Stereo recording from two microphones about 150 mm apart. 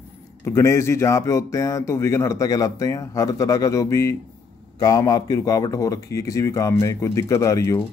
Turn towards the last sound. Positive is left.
turn(degrees=20)  # may be behind; listen again after turning